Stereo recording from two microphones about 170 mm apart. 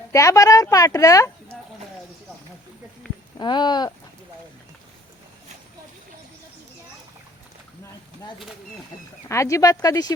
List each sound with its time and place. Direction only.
0.1 s a child's voice: 20° left (ahead or behind)
3.3 s a child's voice: 25° left (ahead or behind)
9.3 s a child's voice: 15° left (ahead or behind)